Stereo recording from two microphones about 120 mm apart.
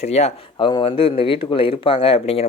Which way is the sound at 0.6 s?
40° left (ahead or behind).